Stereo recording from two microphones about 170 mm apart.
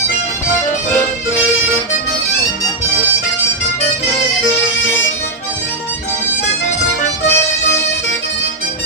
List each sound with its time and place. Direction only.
7.2 s music: 15° left (ahead or behind)